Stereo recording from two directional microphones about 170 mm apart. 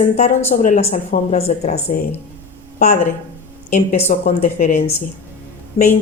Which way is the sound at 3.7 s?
45° left (ahead or behind).